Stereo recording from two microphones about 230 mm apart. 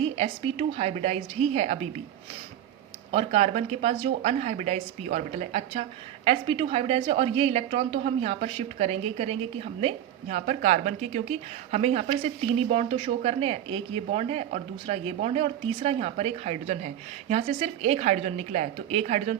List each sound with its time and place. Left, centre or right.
0.0 s a woman's voice: right
3.1 s a woman's voice: right